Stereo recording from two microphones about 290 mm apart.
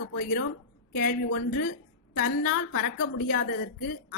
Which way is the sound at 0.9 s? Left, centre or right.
Left.